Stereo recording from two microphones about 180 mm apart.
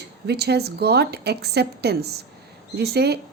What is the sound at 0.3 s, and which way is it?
A woman's voice, 65° right (ahead or behind).